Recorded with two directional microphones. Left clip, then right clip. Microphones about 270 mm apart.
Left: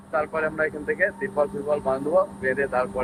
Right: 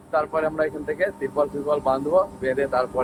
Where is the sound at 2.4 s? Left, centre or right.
Centre.